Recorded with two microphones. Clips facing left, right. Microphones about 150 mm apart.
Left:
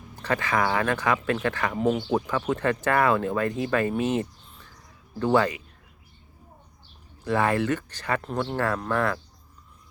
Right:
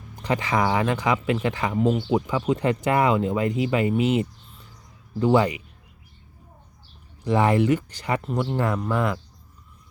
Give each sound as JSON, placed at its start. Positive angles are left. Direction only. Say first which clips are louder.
{"t": 0.2, "sound": "speech", "louder": "right 2 dB", "side_deg": -15}
{"t": 1.7, "sound": "speech", "louder": "right 3 dB", "side_deg": 0}
{"t": 2.0, "sound": "speech", "louder": "right 3 dB", "side_deg": -15}
{"t": 7.3, "sound": "speech", "louder": "right 4 dB", "side_deg": -15}